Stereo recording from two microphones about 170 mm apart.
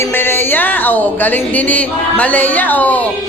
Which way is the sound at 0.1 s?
15° left (ahead or behind).